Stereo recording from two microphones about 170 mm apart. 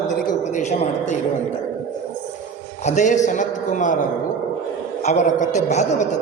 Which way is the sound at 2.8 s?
45° left (ahead or behind).